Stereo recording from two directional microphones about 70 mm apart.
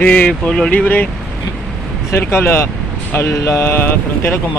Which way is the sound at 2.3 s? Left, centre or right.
Left.